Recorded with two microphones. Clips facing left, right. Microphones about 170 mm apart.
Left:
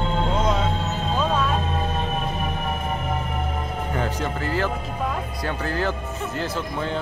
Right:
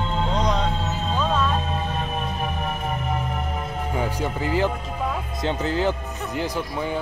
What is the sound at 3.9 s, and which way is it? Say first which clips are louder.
Speech: right 1 dB; 10° right (ahead or behind).